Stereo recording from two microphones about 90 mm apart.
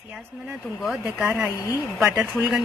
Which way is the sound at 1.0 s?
15° right (ahead or behind).